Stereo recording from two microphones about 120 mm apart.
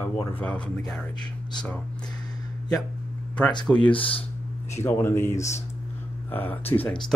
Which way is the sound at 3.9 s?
50° left (ahead or behind).